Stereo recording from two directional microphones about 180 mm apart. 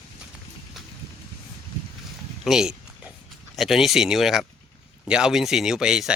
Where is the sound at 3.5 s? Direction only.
Centre (ahead or behind).